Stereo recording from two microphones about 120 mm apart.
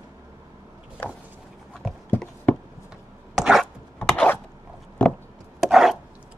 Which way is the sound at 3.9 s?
10° left (ahead or behind).